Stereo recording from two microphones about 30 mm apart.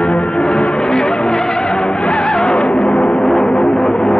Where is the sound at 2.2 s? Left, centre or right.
Centre.